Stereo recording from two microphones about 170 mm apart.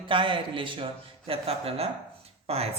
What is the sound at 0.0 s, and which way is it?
Speech, 30° right (ahead or behind).